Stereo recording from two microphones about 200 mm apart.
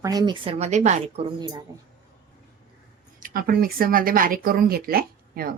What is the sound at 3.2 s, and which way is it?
Speech, 45° right (ahead or behind).